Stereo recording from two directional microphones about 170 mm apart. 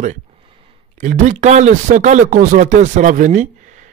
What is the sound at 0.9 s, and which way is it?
Speech, 45° right (ahead or behind).